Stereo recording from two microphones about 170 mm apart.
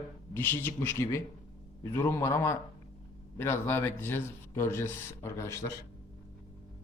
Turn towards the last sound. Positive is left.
turn(degrees=15)  # may be behind; listen again after turning